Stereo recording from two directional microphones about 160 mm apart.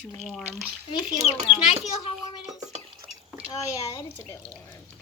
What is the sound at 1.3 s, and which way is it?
Child singing, 40° left (ahead or behind).